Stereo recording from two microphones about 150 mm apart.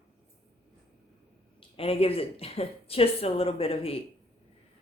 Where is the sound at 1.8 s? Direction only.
40° left (ahead or behind).